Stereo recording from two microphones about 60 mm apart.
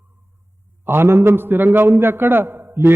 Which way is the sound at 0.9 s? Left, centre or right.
Right.